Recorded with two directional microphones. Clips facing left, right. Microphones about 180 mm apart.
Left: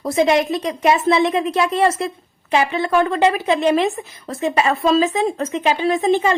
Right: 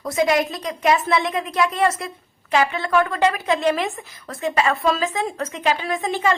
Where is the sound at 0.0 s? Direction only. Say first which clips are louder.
Left 3 dB; 25° left (ahead or behind).